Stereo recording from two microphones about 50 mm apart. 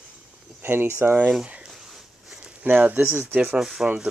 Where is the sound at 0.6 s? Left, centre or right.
Right.